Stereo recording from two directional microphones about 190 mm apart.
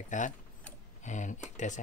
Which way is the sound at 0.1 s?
40° left (ahead or behind).